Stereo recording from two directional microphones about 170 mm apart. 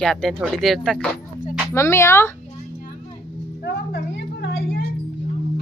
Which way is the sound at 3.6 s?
85° left.